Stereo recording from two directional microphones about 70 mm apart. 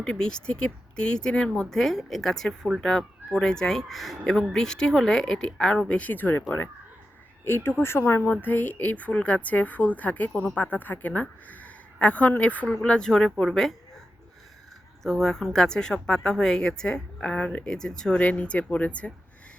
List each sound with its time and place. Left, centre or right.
0.0 s speech: centre
5.9 s speech: left
7.4 s speech: left; by 13.7 s centre
15.0 s speech: centre
18.2 s speech: left